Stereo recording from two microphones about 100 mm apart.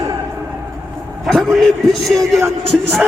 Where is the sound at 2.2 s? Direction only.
25° right (ahead or behind).